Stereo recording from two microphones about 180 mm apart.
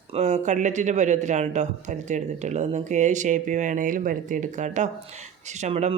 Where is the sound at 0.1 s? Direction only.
40° right (ahead or behind).